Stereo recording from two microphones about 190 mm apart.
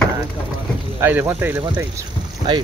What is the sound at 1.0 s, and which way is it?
Speech, 10° right (ahead or behind).